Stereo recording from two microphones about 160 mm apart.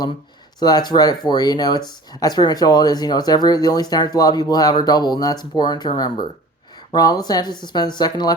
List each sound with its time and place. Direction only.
0.6 s speech: 25° left (ahead or behind)